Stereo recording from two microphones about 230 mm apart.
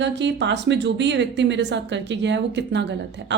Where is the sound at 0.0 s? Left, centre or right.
Right.